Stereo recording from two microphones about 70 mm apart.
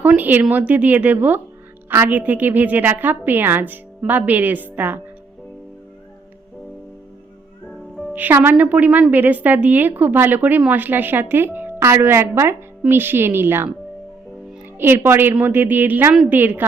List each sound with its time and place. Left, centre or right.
0.2 s a woman's voice: right
7.7 s music: centre
8.1 s a woman's voice: right
14.8 s a woman's voice: right